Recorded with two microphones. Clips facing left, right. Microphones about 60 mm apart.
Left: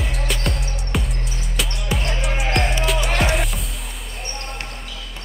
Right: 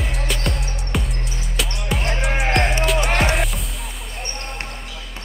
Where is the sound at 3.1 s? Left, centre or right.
Centre.